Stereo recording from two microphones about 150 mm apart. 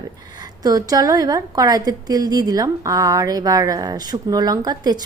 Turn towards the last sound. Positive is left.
turn(degrees=-25)  # may be behind; listen again after turning